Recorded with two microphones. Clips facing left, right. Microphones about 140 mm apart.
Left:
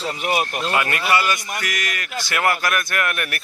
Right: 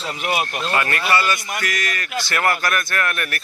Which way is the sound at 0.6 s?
15° left (ahead or behind).